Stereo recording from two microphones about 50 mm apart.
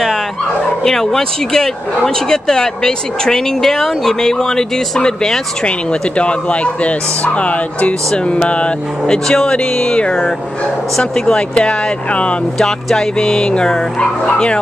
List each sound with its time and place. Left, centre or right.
0.8 s speech: centre
5.7 s speech: left
12.5 s speech: centre